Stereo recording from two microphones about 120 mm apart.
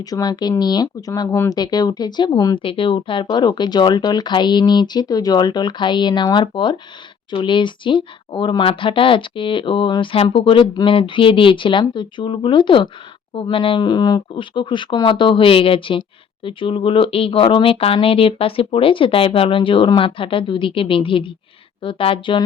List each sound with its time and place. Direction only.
0.0 s speech: 30° left (ahead or behind)
2.6 s speech: 45° left (ahead or behind)